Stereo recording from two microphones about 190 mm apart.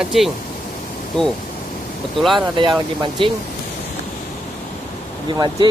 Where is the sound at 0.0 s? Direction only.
Centre (ahead or behind).